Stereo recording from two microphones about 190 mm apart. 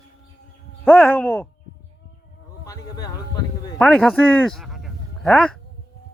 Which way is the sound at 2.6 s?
20° left (ahead or behind).